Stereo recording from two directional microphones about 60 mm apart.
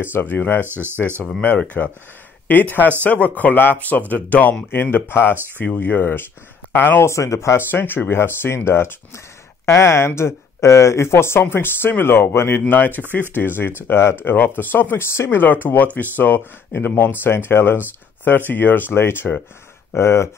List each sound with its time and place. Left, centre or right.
0.0 s speech: left
0.7 s speech: right
1.4 s speech: left
7.1 s speech: left
7.5 s speech: left
14.2 s speech: left